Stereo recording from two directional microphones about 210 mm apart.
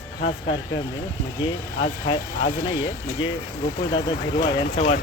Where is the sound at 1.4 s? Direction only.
25° left (ahead or behind).